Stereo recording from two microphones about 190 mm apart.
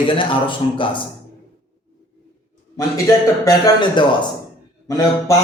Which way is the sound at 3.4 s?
25° left (ahead or behind).